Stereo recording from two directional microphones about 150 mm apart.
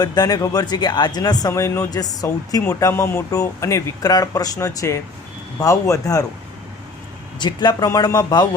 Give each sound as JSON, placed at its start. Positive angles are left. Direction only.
{"t": 0.0, "sound": "speech", "side_deg": 25}
{"t": 7.3, "sound": "speech", "side_deg": 30}